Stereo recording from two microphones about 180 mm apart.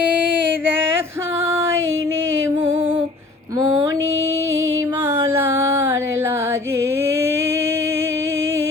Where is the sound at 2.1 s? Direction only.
90° right.